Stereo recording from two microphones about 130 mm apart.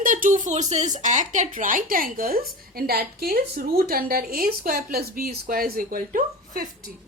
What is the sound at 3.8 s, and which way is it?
A woman's voice, 90° right.